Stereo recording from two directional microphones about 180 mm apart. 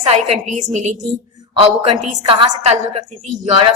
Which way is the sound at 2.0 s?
40° right (ahead or behind).